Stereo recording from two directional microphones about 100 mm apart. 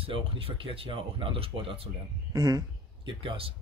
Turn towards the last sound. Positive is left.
turn(degrees=-60)  # may be behind; listen again after turning